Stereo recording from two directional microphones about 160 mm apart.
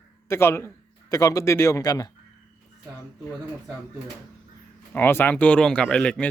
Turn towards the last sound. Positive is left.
turn(degrees=5)  # may be behind; listen again after turning